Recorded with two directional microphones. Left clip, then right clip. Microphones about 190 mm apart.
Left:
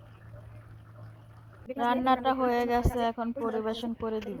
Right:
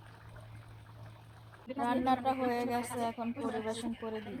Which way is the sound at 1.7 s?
30° left (ahead or behind).